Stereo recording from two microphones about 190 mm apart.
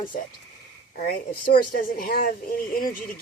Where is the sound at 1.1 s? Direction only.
50° left (ahead or behind).